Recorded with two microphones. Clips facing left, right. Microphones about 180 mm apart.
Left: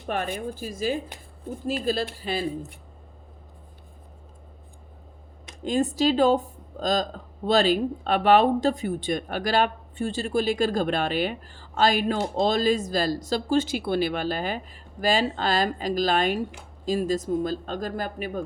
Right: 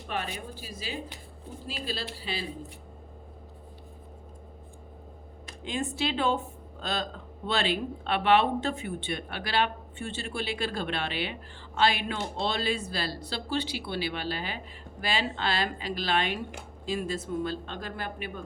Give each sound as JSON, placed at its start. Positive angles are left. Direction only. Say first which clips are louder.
{"t": 0.1, "sound": "speech", "louder": "left 7 dB", "side_deg": 50}
{"t": 5.6, "sound": "speech", "louder": "left 9 dB", "side_deg": 40}